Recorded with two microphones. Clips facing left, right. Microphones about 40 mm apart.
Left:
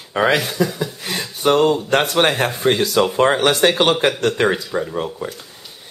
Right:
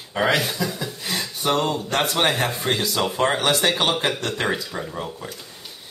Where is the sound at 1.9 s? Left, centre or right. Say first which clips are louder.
Left 5 dB; left.